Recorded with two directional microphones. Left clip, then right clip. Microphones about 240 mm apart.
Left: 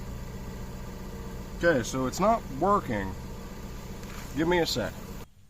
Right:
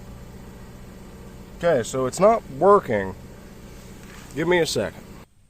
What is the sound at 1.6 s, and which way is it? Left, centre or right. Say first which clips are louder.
Speech: right 5 dB; right.